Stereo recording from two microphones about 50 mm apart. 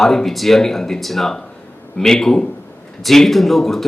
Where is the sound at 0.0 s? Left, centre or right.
Centre.